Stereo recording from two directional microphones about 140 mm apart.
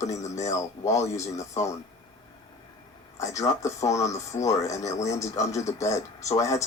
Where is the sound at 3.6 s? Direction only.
20° left (ahead or behind).